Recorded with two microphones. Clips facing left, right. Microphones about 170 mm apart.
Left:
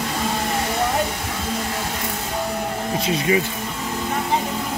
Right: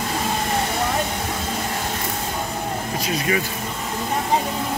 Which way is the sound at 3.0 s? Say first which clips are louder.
Left 4 dB; 20° left (ahead or behind).